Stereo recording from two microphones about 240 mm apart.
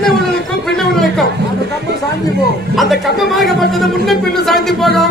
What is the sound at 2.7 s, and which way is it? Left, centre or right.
Speech, centre.